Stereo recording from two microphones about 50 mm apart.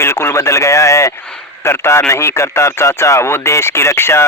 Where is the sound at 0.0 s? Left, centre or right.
Left.